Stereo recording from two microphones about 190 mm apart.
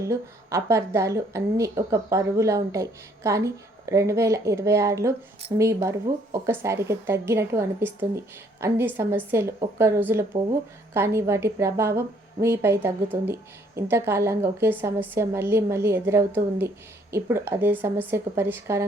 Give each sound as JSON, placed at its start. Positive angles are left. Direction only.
{"t": 0.0, "sound": "a woman's voice", "side_deg": -15}